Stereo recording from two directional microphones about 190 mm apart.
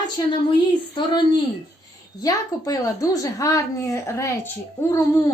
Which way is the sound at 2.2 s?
20° left (ahead or behind).